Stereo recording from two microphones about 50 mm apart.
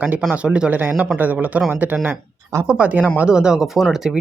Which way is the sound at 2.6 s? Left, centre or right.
Right.